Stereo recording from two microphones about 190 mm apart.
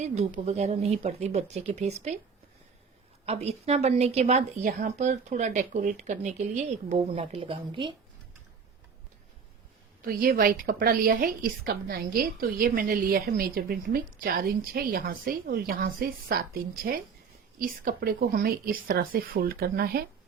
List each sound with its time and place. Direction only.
0.0 s speech: 35° right (ahead or behind)
3.2 s speech: 35° right (ahead or behind)
10.0 s a woman's voice: 50° right (ahead or behind)